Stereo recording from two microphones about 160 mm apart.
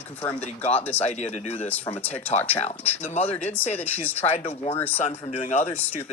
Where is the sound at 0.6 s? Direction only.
40° left (ahead or behind).